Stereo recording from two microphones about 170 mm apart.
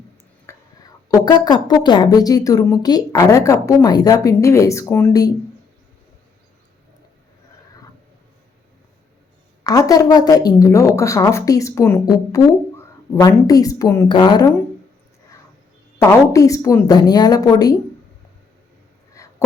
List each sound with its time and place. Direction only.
0.5 s whispering: 15° left (ahead or behind)
1.2 s speech: 25° left (ahead or behind)
9.6 s speech: 20° left (ahead or behind)
16.0 s speech: 20° left (ahead or behind)
19.2 s a sound: 20° left (ahead or behind)